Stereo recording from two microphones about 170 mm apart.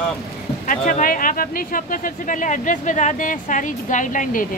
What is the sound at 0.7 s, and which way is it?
Speech, 50° left (ahead or behind).